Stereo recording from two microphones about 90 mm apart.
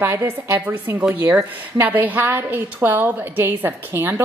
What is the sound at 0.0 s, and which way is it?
A woman's voice, 30° right (ahead or behind).